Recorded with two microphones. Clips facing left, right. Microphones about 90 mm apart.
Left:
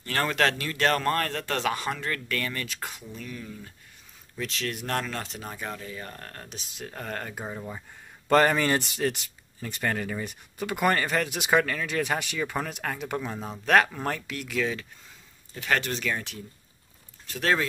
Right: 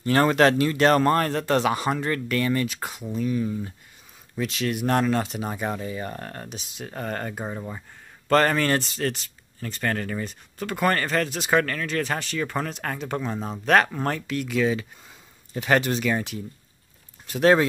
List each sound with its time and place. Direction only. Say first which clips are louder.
0.0 s speech: right 7 dB; 20° right (ahead or behind)
5.5 s speech: right 7 dB; 20° right (ahead or behind)
6.5 s speech: right 4 dB; centre (ahead or behind)
8.3 s speech: right 1 dB; 10° left (ahead or behind); by 14.9 s 5° right (ahead or behind)
15.5 s speech: right 6 dB; 20° right (ahead or behind)
15.8 s speech: right 6 dB; 10° right (ahead or behind)